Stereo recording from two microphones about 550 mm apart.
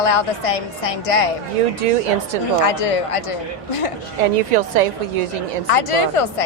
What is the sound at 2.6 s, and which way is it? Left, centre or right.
Speech, left.